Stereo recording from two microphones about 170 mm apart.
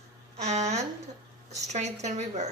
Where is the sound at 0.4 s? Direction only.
40° right (ahead or behind).